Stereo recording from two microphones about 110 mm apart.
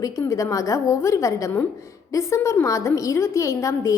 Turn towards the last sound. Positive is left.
turn(degrees=25)  # may be behind; listen again after turning